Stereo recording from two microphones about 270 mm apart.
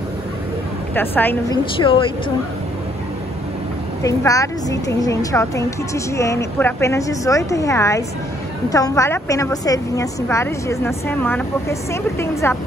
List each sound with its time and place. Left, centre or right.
0.9 s a woman's voice: centre
1.8 s speech: centre
4.0 s a woman's voice: centre